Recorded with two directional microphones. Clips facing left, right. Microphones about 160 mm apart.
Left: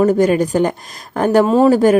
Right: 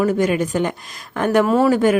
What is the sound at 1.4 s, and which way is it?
Speech, 20° left (ahead or behind).